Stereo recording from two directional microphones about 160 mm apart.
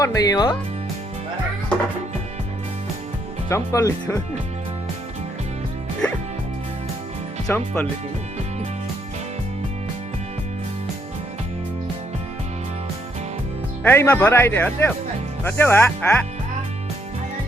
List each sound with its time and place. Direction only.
0.0 s speech: 25° left (ahead or behind)
3.5 s speech: 20° left (ahead or behind)
7.4 s speech: 5° left (ahead or behind)
13.8 s speech: 15° left (ahead or behind)